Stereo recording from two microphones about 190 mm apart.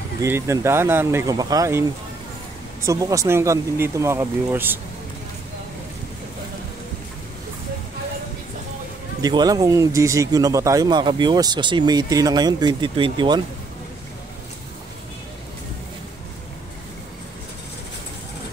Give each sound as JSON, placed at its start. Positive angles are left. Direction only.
{"t": 0.2, "sound": "speech", "side_deg": -15}
{"t": 9.2, "sound": "speech", "side_deg": -20}